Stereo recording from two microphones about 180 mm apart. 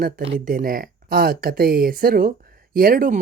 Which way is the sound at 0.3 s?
50° right (ahead or behind).